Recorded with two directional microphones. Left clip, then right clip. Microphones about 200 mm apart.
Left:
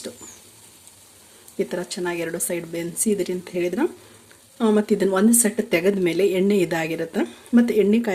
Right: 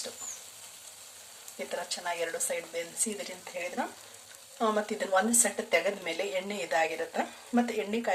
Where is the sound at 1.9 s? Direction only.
45° left (ahead or behind).